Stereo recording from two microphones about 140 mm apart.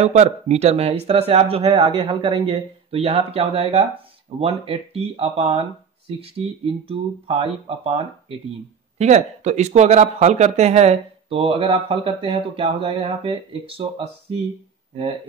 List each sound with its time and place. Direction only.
0.0 s speech: 55° right (ahead or behind)